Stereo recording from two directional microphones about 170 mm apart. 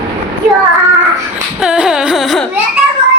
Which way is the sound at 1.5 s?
5° right (ahead or behind).